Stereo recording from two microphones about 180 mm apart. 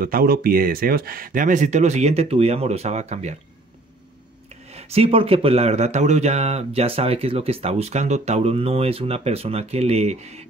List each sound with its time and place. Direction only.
0.0 s speech: 55° right (ahead or behind); by 3.3 s 40° right (ahead or behind)
4.6 s speech: 35° right (ahead or behind)